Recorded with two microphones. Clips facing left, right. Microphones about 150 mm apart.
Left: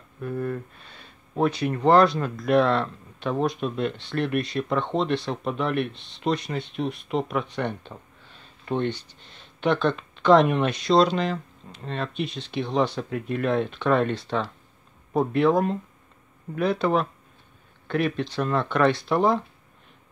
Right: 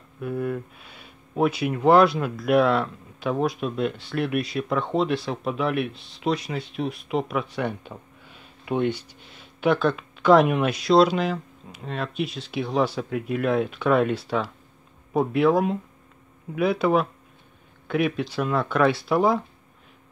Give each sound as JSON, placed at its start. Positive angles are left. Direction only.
{"t": 0.2, "sound": "speech", "side_deg": -10}